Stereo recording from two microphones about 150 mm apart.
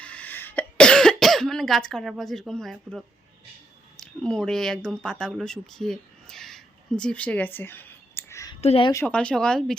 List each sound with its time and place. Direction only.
0.0 s cough: 10° left (ahead or behind)
4.0 s speech: 5° left (ahead or behind); by 8.5 s 20° left (ahead or behind)
8.6 s speech: 40° left (ahead or behind)
9.0 s speech: 5° left (ahead or behind)